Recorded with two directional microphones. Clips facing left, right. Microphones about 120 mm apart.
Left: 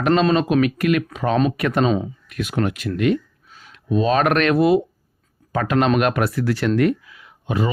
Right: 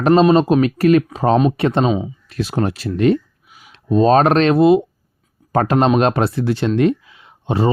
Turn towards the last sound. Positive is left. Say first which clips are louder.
# right 5 dB
turn(degrees=-30)  # may be behind; listen again after turning